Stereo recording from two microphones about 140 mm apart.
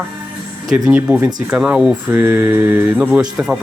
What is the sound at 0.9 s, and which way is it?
Speech, 10° right (ahead or behind).